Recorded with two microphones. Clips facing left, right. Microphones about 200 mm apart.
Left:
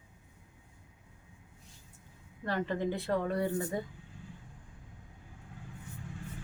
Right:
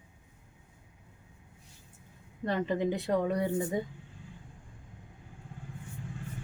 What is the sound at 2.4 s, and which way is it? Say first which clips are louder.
A woman's voice: right 3 dB; 20° right (ahead or behind).